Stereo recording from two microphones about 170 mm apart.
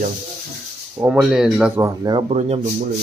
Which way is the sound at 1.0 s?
5° right (ahead or behind).